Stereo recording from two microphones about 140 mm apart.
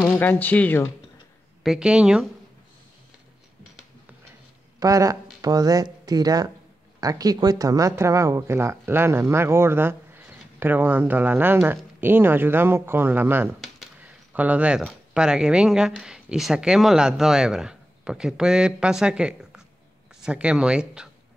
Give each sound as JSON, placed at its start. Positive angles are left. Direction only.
{"t": 0.0, "sound": "speech", "side_deg": 15}
{"t": 1.6, "sound": "speech", "side_deg": -5}
{"t": 4.7, "sound": "speech", "side_deg": -25}
{"t": 14.0, "sound": "a sound", "side_deg": -10}
{"t": 15.1, "sound": "speech", "side_deg": -5}